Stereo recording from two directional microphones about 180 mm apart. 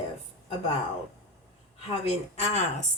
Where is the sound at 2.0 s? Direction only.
40° left (ahead or behind).